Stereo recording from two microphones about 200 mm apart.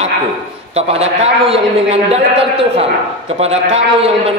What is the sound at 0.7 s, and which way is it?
A man's voice, 30° right (ahead or behind).